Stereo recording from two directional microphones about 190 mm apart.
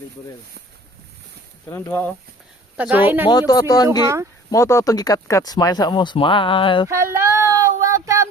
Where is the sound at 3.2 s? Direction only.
20° left (ahead or behind).